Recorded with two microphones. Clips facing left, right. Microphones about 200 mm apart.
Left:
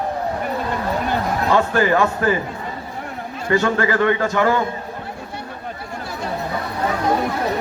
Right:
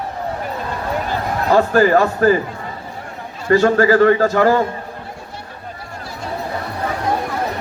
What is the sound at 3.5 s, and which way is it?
A man's voice, 35° right (ahead or behind).